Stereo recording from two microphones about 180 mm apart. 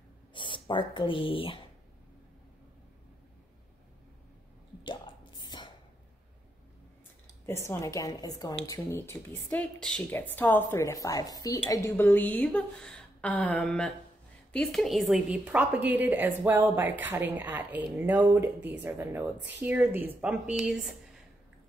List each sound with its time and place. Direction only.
0.3 s speech: 25° left (ahead or behind)
4.8 s whispering: 25° left (ahead or behind)
7.4 s a woman's voice: 15° left (ahead or behind); by 20.9 s centre (ahead or behind)